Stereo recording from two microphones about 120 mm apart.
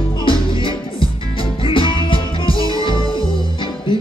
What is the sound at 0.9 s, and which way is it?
Music, 45° left (ahead or behind).